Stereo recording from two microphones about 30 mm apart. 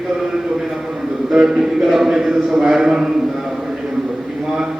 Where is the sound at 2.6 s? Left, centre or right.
Centre.